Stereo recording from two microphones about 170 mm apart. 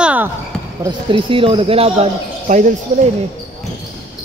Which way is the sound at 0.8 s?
30° right (ahead or behind).